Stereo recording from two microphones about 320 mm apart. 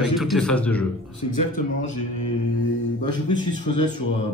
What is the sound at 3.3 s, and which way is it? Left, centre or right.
Speech, right.